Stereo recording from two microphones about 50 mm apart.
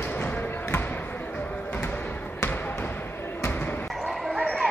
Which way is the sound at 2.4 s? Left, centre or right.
Left.